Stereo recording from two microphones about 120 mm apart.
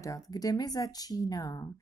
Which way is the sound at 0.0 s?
30° left (ahead or behind).